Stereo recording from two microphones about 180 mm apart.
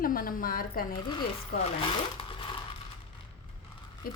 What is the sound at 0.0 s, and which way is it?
Speech, 50° left (ahead or behind).